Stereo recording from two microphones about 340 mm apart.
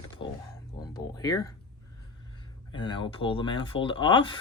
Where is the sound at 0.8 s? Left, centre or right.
Centre.